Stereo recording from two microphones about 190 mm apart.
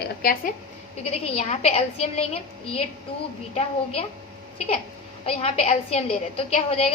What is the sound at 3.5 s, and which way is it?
Speech, 30° left (ahead or behind).